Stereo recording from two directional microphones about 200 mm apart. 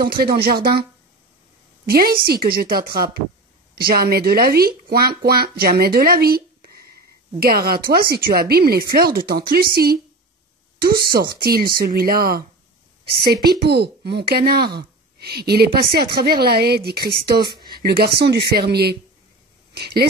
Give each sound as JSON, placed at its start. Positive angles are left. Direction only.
{"t": 0.0, "sound": "speech", "side_deg": -50}
{"t": 1.9, "sound": "speech", "side_deg": -50}
{"t": 17.4, "sound": "speech", "side_deg": -20}
{"t": 17.7, "sound": "speech", "side_deg": -50}